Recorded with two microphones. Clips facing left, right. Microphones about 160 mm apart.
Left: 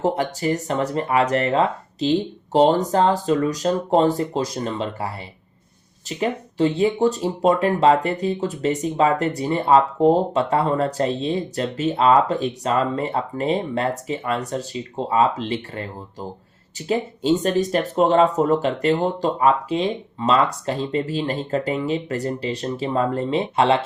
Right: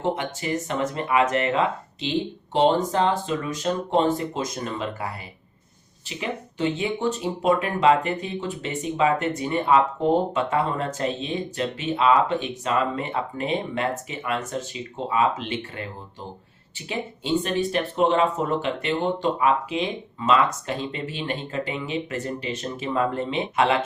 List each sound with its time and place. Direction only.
0.0 s speech: 40° left (ahead or behind)